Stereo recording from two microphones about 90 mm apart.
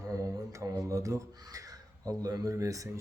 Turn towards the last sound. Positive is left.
turn(degrees=-40)  # may be behind; listen again after turning